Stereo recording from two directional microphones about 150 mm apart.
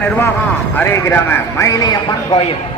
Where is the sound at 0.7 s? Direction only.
15° left (ahead or behind).